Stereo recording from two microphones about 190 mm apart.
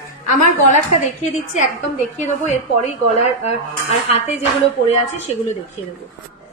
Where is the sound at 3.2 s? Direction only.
35° left (ahead or behind).